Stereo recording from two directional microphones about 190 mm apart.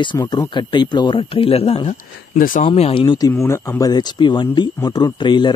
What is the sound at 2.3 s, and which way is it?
Speech, 45° left (ahead or behind).